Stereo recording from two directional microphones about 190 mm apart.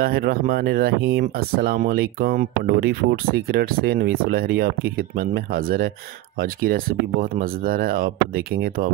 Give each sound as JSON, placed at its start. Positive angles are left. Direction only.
{"t": 0.0, "sound": "speech", "side_deg": -55}